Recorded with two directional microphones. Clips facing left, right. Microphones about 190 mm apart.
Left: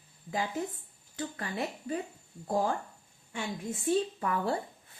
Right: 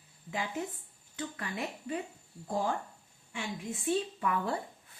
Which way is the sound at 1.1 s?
35° left (ahead or behind).